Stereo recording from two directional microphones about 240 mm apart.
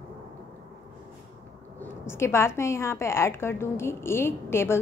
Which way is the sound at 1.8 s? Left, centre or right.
Centre.